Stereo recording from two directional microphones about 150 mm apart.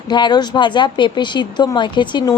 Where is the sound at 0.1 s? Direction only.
30° left (ahead or behind).